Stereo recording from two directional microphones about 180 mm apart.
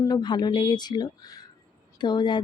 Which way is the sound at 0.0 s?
20° left (ahead or behind).